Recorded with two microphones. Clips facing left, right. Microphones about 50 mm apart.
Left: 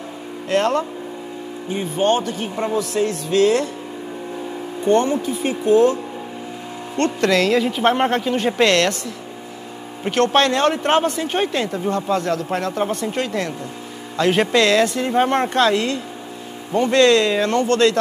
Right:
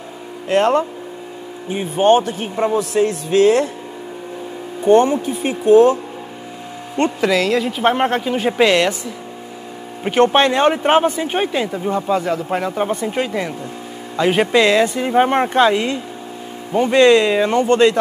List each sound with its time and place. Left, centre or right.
0.5 s speech: centre
4.8 s speech: centre
7.0 s speech: centre
10.0 s speech: centre